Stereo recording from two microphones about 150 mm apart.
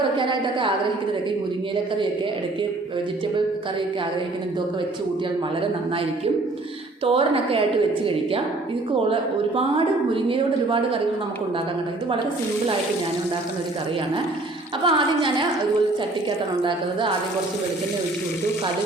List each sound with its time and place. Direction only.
0.2 s a woman's voice: 35° right (ahead or behind)
7.0 s a woman's voice: 40° right (ahead or behind)
10.2 s a woman's voice: 35° right (ahead or behind)
14.8 s a woman's voice: 35° right (ahead or behind)